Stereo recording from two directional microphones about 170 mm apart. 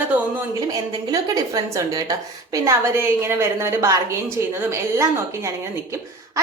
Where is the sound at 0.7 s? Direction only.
20° right (ahead or behind).